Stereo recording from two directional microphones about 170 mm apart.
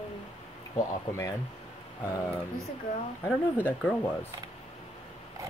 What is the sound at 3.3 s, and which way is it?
Speech, 10° left (ahead or behind).